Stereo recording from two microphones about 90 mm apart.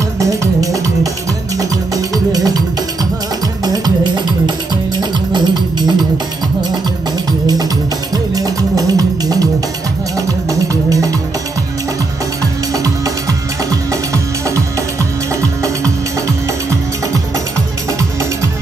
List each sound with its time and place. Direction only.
0.2 s music: 35° right (ahead or behind); by 6.0 s 55° right (ahead or behind)
7.2 s music: 50° right (ahead or behind)
12.7 s music: 40° right (ahead or behind)
15.6 s music: 35° right (ahead or behind)